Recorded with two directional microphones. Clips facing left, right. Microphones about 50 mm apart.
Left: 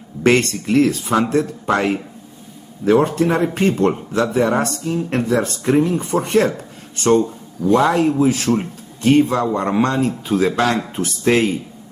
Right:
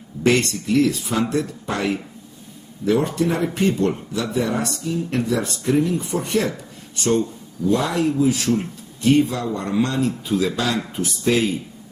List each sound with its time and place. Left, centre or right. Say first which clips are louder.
0.2 s speech: left 3 dB; left